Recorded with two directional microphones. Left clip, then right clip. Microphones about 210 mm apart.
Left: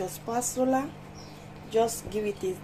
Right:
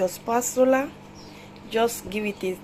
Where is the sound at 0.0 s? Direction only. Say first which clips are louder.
Right 7 dB; 20° right (ahead or behind).